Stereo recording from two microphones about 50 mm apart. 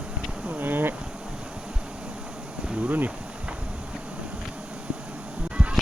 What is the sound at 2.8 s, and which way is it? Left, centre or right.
Speech, right.